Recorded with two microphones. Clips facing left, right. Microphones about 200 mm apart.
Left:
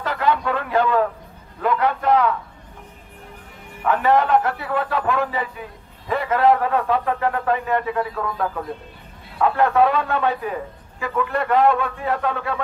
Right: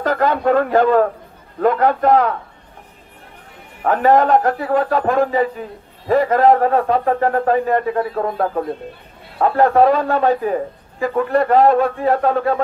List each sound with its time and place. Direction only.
0.0 s a man's voice: 45° right (ahead or behind)
3.8 s a man's voice: 45° right (ahead or behind)